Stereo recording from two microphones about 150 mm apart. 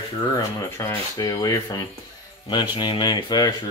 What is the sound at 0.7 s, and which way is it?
Speech, 20° left (ahead or behind).